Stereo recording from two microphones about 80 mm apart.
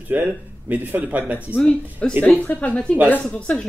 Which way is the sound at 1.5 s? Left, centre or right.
Centre.